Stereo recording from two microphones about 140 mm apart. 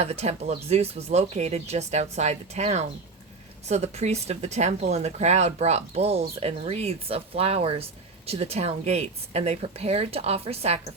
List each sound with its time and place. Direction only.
0.0 s speech: 50° right (ahead or behind)